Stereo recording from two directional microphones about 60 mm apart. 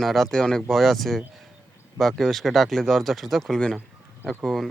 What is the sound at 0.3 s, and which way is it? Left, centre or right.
Speech, centre.